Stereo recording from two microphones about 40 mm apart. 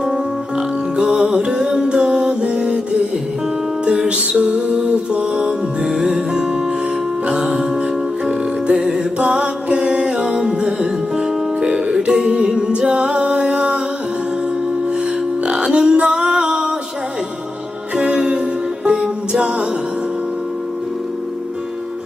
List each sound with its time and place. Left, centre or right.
0.0 s music: centre
3.8 s music: centre
4.4 s music: right
15.7 s music: right
17.9 s music: right